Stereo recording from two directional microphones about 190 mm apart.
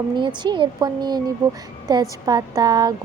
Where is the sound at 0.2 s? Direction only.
25° right (ahead or behind).